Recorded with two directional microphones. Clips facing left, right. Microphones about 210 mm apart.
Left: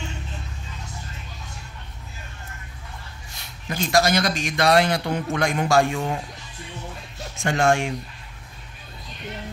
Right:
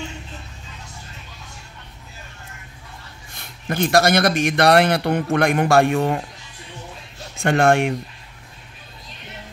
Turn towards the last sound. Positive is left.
turn(degrees=-60)  # may be behind; listen again after turning